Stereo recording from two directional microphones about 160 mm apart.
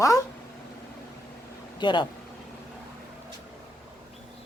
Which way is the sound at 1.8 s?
30° left (ahead or behind).